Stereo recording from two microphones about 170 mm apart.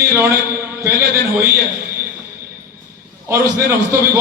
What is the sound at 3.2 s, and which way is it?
Speech, 15° right (ahead or behind).